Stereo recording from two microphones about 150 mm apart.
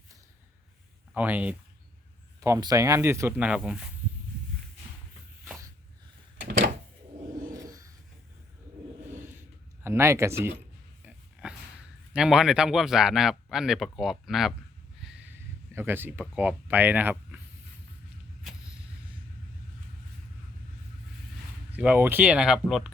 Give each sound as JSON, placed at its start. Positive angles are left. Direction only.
{"t": 1.1, "sound": "speech", "side_deg": -10}
{"t": 2.4, "sound": "speech", "side_deg": -20}
{"t": 7.5, "sound": "a sound", "side_deg": -25}
{"t": 9.8, "sound": "speech", "side_deg": -15}
{"t": 11.0, "sound": "a sound", "side_deg": -5}
{"t": 12.1, "sound": "speech", "side_deg": -5}
{"t": 15.3, "sound": "a sound", "side_deg": -15}
{"t": 16.3, "sound": "speech", "side_deg": -10}
{"t": 21.7, "sound": "speech", "side_deg": -10}